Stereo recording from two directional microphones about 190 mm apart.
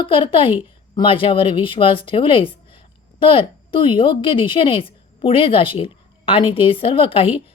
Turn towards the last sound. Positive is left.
turn(degrees=30)  # may be behind; listen again after turning